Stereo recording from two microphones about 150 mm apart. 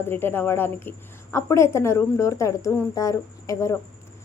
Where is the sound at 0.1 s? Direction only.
15° left (ahead or behind).